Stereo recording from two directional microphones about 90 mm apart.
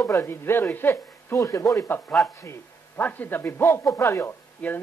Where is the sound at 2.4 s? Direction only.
30° left (ahead or behind).